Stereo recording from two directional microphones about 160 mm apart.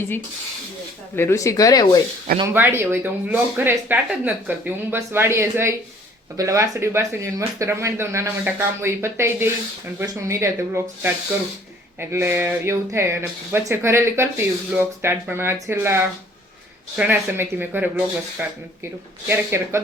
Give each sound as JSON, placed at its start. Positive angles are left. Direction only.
{"t": 1.1, "sound": "speech", "side_deg": 15}
{"t": 2.5, "sound": "speech", "side_deg": -10}
{"t": 17.0, "sound": "speech", "side_deg": -15}